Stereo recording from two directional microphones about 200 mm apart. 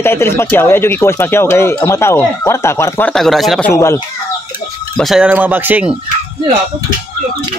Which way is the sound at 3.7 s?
15° left (ahead or behind).